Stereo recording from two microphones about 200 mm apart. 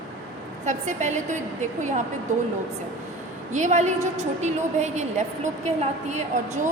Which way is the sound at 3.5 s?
35° right (ahead or behind).